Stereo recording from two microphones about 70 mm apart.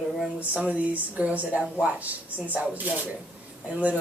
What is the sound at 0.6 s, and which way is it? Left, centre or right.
Speech, centre.